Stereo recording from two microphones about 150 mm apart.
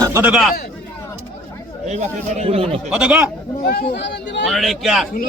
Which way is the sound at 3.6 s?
85° left.